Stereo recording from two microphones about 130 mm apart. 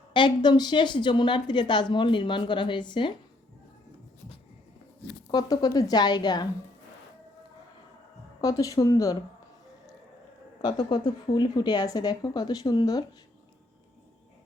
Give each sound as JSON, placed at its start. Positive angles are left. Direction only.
{"t": 0.1, "sound": "speech", "side_deg": 35}
{"t": 5.3, "sound": "speech", "side_deg": 30}
{"t": 8.4, "sound": "speech", "side_deg": 25}
{"t": 10.7, "sound": "speech", "side_deg": 40}